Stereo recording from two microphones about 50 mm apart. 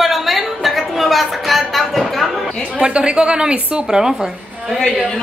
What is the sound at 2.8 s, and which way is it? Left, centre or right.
A woman's voice, right.